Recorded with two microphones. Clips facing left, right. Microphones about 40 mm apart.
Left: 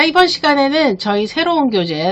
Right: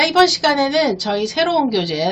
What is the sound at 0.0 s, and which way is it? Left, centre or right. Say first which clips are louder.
Speech: left 2 dB; centre.